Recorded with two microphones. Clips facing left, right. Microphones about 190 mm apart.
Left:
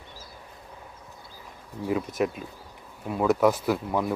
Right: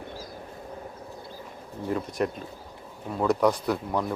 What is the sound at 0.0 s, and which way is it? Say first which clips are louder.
Vehicle: right 8 dB; 50° right (ahead or behind).